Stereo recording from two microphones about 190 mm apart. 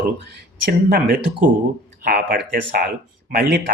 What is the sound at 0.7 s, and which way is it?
Speech, 50° right (ahead or behind).